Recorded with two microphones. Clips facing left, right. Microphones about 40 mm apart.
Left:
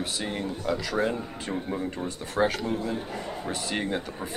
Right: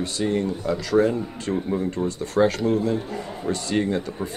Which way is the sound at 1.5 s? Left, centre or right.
Centre.